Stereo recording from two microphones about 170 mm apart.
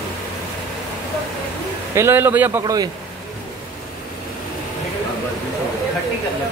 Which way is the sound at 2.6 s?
25° right (ahead or behind).